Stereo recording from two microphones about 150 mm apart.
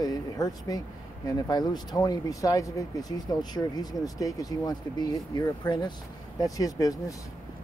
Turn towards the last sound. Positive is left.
turn(degrees=25)  # may be behind; listen again after turning